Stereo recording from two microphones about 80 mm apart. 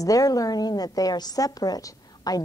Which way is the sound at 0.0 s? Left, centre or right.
Left.